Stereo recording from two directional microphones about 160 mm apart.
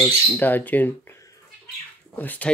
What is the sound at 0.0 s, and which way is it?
Speech, 10° left (ahead or behind).